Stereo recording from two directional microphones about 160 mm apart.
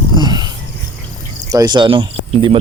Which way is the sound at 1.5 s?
25° right (ahead or behind).